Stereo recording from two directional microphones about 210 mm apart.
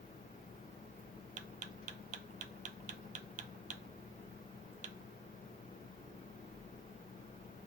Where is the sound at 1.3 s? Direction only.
35° right (ahead or behind).